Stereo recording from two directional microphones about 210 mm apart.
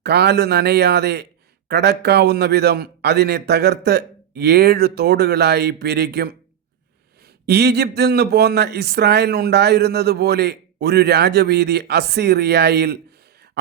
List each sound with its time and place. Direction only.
0.0 s a man's voice: 50° right (ahead or behind)
7.4 s a man's voice: 50° right (ahead or behind)